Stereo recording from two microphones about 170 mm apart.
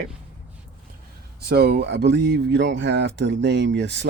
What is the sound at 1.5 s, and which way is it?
Speech, 70° right (ahead or behind).